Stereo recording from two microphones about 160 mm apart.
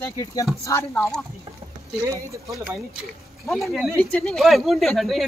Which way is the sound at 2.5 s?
10° right (ahead or behind).